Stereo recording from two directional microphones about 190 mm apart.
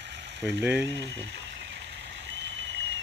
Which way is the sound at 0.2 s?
70° right (ahead or behind).